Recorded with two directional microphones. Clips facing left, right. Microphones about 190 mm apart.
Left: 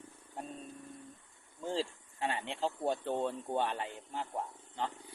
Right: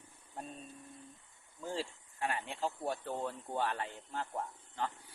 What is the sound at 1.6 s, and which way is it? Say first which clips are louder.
Speech: left 4 dB; 25° left (ahead or behind).